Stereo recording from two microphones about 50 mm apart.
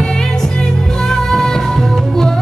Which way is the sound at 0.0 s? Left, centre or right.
Centre.